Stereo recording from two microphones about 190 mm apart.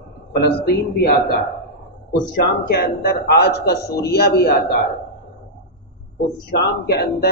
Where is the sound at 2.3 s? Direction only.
55° left (ahead or behind).